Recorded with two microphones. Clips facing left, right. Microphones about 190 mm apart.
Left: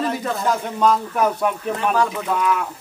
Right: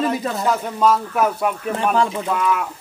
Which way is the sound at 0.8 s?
5° right (ahead or behind).